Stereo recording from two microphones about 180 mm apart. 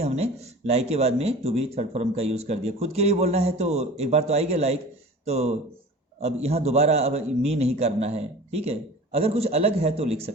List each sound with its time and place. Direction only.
0.0 s speech: 35° right (ahead or behind)